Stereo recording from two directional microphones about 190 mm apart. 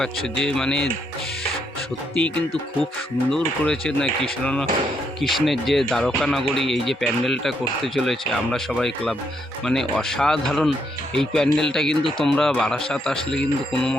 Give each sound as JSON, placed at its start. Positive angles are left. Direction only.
{"t": 0.0, "sound": "speech", "side_deg": 5}
{"t": 3.2, "sound": "speech", "side_deg": 5}